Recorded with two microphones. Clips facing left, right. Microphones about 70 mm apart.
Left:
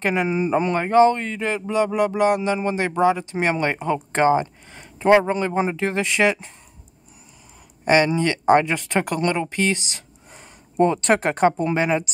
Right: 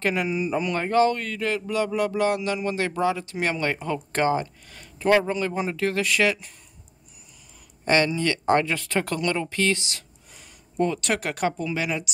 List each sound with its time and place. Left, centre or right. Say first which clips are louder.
0.0 s speech: left 4 dB; left
0.7 s speech: left 5 dB; left
7.8 s speech: left 4 dB; centre